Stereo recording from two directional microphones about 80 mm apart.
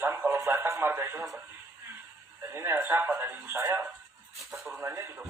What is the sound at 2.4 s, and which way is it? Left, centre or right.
Speech, right.